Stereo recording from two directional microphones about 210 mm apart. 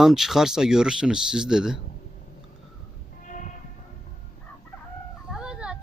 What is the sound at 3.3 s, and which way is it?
Music, 35° left (ahead or behind).